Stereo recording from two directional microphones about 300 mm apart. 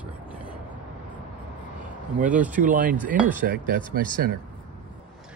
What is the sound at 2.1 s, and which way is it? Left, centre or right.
Speech, right.